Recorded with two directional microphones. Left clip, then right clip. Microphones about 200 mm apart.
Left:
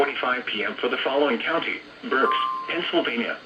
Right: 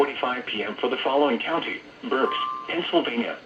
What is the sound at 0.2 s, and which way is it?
Speech, 35° right (ahead or behind).